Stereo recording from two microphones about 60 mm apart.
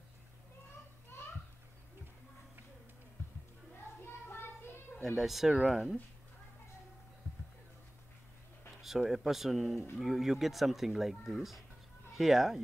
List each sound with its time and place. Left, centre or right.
3.7 s a sound: left
5.0 s speech: centre
8.8 s speech: centre